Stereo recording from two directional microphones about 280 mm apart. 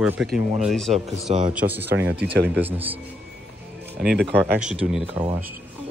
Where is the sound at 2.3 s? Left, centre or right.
Right.